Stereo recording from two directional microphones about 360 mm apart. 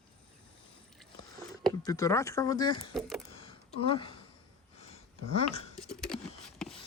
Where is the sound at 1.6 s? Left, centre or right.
Centre.